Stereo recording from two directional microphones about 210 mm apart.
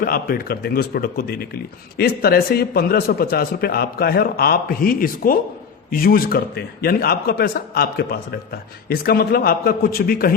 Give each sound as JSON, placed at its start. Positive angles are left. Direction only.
{"t": 0.0, "sound": "a man's voice", "side_deg": 45}